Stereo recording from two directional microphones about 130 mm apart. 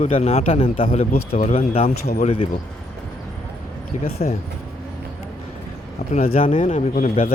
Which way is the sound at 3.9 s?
70° left (ahead or behind).